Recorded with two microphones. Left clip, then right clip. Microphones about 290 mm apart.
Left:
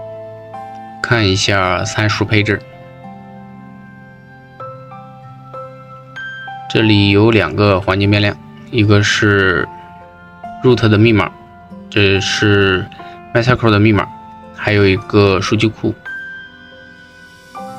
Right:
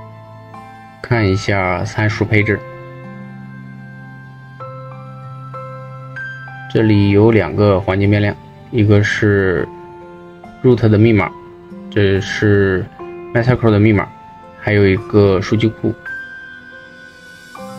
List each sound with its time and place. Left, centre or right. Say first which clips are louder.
0.5 s music: left 4 dB; centre
1.0 s speech: left 3 dB; left
6.7 s speech: left 2 dB; left